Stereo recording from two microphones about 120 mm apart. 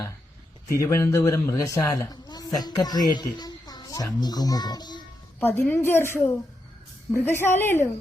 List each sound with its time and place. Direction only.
0.8 s a woman's voice: 25° left (ahead or behind)
5.4 s a woman's voice: 15° left (ahead or behind)